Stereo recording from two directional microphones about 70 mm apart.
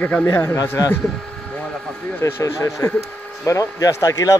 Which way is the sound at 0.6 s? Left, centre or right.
Left.